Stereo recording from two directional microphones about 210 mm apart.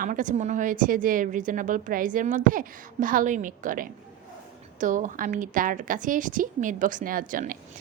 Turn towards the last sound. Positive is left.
turn(degrees=-40)  # may be behind; listen again after turning